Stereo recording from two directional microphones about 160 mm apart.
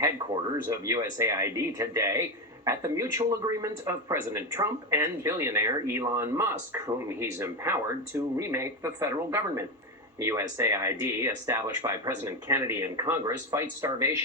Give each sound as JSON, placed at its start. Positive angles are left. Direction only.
{"t": 0.7, "sound": "speech", "side_deg": -20}